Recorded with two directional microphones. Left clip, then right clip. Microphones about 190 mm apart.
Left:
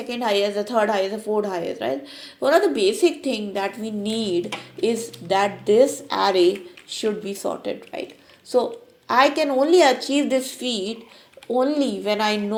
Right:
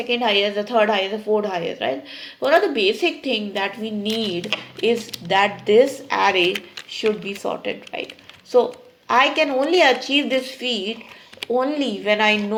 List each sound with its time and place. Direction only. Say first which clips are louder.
0.1 s a woman's voice: right 2 dB; 30° left (ahead or behind)
6.9 s a woman's voice: right 3 dB; 30° left (ahead or behind)
10.6 s speech: right 2 dB; centre (ahead or behind)
11.5 s a woman's voice: even; 30° left (ahead or behind)